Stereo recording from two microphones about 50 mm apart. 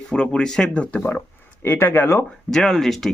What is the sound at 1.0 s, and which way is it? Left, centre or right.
Speech, left.